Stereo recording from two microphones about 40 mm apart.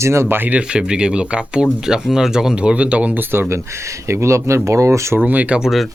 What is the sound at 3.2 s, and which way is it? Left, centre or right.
Speech, right.